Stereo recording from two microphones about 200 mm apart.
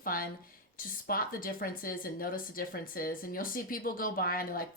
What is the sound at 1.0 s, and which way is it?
Speech, 45° left (ahead or behind).